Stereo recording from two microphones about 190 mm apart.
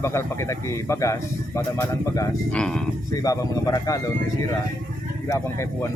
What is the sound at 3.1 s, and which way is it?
Speech, 20° left (ahead or behind).